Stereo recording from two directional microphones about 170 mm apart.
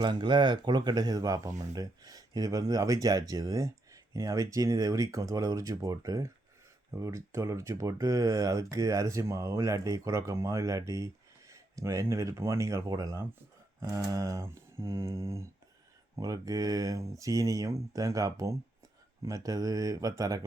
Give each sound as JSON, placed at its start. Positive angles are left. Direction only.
{"t": 0.0, "sound": "speech", "side_deg": -25}